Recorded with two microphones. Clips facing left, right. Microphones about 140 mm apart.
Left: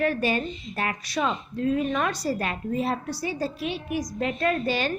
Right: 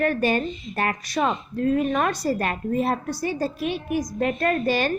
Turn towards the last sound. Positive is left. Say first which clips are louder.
# right 3 dB
turn(degrees=-50)  # may be behind; listen again after turning